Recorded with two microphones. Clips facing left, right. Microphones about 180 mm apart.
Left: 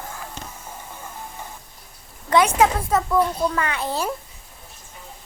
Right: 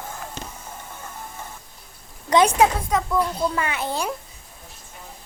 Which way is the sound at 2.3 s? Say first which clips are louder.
Right 1 dB; 20° right (ahead or behind).